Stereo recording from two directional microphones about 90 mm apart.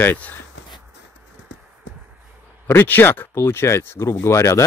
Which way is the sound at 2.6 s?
25° left (ahead or behind).